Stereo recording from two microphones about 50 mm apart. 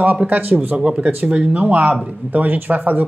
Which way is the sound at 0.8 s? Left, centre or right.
Centre.